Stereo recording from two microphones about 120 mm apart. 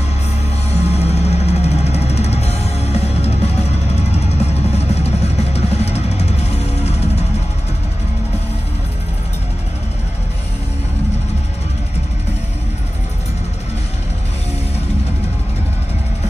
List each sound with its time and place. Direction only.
0.7 s music: 65° left (ahead or behind)